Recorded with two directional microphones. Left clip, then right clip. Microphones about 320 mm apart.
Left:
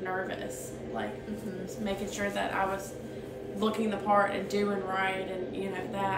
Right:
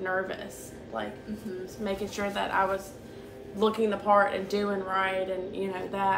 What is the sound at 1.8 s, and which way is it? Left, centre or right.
A woman's voice, centre.